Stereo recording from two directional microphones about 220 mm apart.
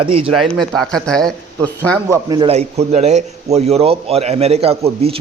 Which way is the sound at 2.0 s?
15° right (ahead or behind).